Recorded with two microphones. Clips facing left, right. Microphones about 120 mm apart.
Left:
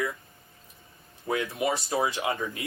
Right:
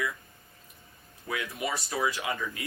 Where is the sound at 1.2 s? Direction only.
30° left (ahead or behind).